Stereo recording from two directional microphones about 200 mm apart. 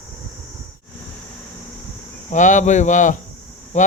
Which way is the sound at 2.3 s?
40° left (ahead or behind).